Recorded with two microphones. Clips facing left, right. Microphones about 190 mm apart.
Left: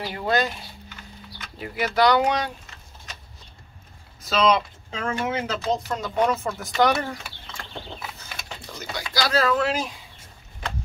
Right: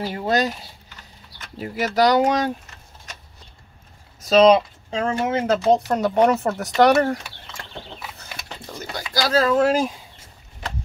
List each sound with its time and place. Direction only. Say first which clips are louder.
0.0 s speech: right 3 dB; 35° right (ahead or behind)
4.4 s speech: right 7 dB; 40° right (ahead or behind)
6.2 s speech: right 5 dB; 70° right (ahead or behind)
8.9 s speech: right 3 dB; 45° right (ahead or behind)